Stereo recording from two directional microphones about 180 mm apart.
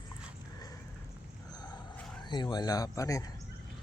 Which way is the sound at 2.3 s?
25° left (ahead or behind).